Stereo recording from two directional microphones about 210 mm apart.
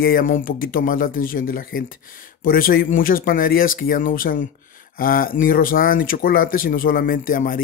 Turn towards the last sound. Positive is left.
turn(degrees=40)  # may be behind; listen again after turning